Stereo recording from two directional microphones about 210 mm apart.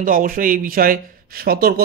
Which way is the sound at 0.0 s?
40° right (ahead or behind).